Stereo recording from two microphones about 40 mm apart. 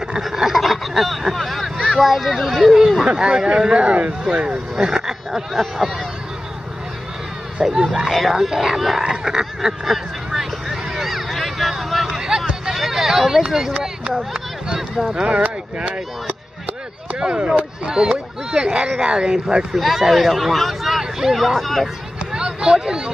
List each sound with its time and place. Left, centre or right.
0.2 s a sound: centre
1.3 s speech: centre
3.1 s speech: right; by 5.9 s centre
7.7 s speech: right
8.1 s speech: centre
8.4 s speech: centre
10.9 s a sound: centre
12.1 s a sound: centre
12.7 s speech: centre; by 15.4 s right
15.4 s speech: right
17.2 s speech: right
18.5 s speech: centre
19.8 s speech: centre
22.3 s a sound: centre